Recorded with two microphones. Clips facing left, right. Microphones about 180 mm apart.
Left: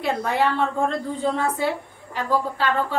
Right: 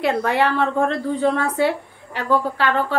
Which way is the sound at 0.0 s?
75° right (ahead or behind).